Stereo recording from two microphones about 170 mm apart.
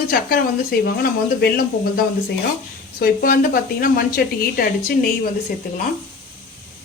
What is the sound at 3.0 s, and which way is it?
Speech, 60° left (ahead or behind).